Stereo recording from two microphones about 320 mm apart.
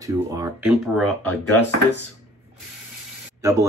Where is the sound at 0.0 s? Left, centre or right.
Centre.